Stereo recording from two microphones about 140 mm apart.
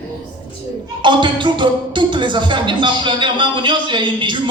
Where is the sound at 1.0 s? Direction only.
35° right (ahead or behind).